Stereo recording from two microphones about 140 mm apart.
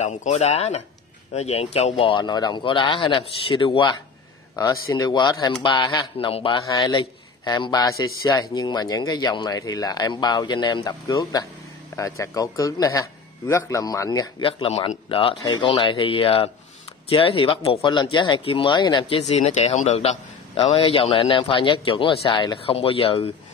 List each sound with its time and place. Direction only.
0.0 s speech: 55° left (ahead or behind); by 6.0 s 30° left (ahead or behind)
6.1 s a man's voice: 40° left (ahead or behind)